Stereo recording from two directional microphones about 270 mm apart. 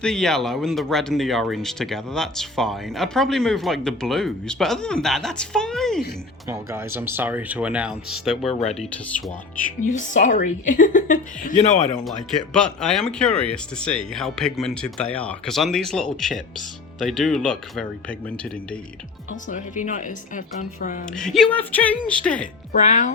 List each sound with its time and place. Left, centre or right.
0.0 s speech: centre
6.5 s speech: centre
10.2 s a woman's voice: left
12.5 s speech: centre
19.5 s a woman's voice: left
21.2 s speech: centre
22.7 s a woman's voice: left